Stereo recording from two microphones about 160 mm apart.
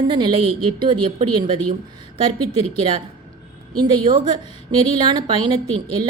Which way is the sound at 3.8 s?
30° right (ahead or behind).